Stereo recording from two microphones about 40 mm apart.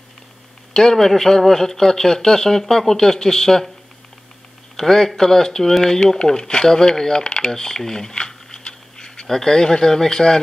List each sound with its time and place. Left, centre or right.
0.7 s a man's voice: centre
4.7 s a man's voice: centre
8.2 s a sound: centre
9.3 s a man's voice: centre